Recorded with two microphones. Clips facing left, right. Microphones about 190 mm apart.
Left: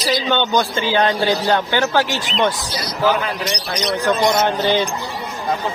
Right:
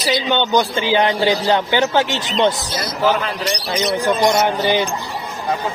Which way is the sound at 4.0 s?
10° right (ahead or behind).